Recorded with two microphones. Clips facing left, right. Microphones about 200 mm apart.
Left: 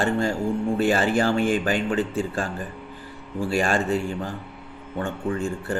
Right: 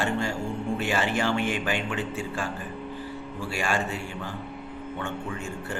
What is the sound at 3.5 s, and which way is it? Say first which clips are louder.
Speech: left 6 dB; 35° left (ahead or behind).